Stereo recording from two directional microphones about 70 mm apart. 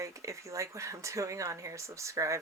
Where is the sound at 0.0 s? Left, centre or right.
Right.